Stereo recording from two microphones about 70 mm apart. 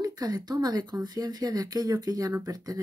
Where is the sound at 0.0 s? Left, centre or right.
Right.